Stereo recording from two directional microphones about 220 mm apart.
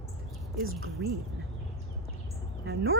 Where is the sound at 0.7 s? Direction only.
70° right (ahead or behind).